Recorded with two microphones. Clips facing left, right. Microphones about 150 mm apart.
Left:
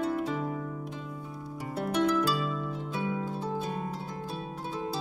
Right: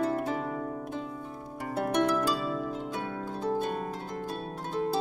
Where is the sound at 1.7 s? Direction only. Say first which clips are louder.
Right 2 dB; 55° right (ahead or behind).